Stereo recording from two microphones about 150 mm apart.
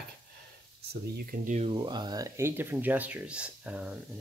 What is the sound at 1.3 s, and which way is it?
Speech, 55° right (ahead or behind).